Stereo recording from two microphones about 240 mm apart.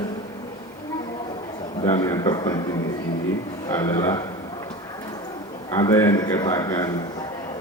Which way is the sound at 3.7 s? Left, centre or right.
Centre.